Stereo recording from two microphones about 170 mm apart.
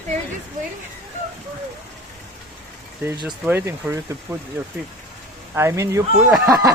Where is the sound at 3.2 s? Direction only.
10° right (ahead or behind).